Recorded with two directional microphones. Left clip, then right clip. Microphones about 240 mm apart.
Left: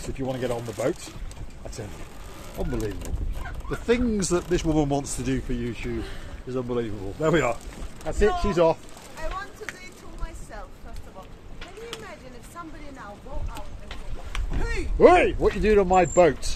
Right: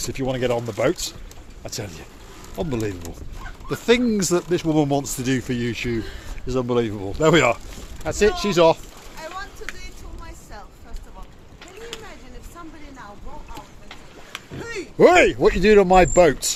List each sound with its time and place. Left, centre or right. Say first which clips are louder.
0.1 s speech: right 5 dB; right
5.5 s speech: right 6 dB; right
9.6 s a sound: right 2 dB; centre
13.5 s vehicle: right 1 dB; centre
14.6 s speech: right 2 dB; centre
14.9 s speech: right 3 dB; right